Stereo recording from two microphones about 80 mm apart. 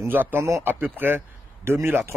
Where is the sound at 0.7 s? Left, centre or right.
Right.